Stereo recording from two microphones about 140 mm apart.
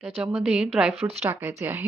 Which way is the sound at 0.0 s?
10° right (ahead or behind).